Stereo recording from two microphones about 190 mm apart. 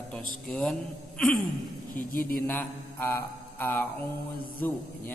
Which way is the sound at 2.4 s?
10° left (ahead or behind).